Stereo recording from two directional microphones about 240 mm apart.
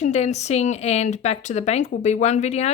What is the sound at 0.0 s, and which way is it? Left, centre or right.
Speech, left.